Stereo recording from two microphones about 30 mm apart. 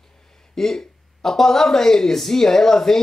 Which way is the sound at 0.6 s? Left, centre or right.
Centre.